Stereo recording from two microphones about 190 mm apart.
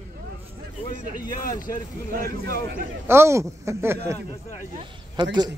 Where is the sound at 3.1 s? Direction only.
15° right (ahead or behind).